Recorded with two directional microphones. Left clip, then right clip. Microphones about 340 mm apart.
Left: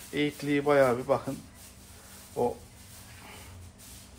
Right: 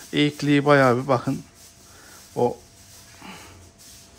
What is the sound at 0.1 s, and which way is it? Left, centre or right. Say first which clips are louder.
Speech: right 8 dB; right.